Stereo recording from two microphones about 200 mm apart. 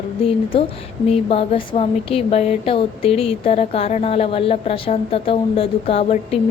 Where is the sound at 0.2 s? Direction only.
30° left (ahead or behind).